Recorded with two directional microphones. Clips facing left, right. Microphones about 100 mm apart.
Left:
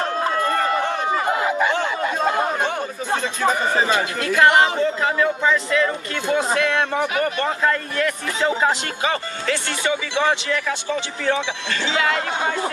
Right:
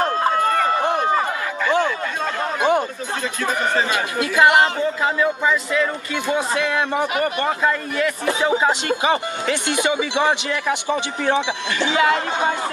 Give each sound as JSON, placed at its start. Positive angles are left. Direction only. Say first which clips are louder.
{"t": 3.9, "sound": "speech", "louder": "even", "side_deg": -10}